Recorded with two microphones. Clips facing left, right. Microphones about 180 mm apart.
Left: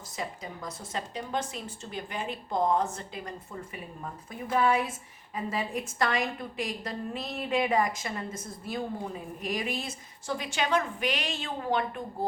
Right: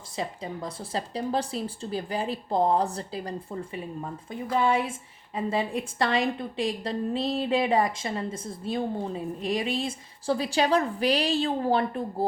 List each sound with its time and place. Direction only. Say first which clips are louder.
0.2 s a woman's voice: right 5 dB; 30° right (ahead or behind)